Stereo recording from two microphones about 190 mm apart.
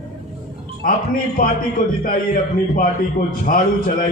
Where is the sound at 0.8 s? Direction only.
50° left (ahead or behind).